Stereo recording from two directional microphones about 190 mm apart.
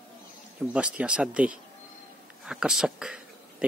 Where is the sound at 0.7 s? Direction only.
5° right (ahead or behind).